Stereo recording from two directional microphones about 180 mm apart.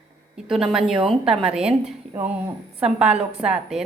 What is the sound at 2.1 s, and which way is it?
Speech, 10° right (ahead or behind).